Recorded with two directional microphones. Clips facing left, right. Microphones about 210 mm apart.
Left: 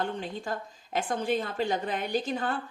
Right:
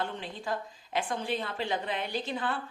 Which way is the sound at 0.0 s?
45° left (ahead or behind).